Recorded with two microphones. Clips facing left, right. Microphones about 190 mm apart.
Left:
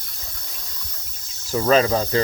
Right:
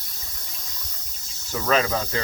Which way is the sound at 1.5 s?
35° left (ahead or behind).